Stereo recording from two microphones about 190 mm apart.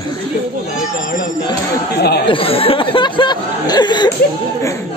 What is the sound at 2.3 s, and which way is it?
Speech, 30° left (ahead or behind).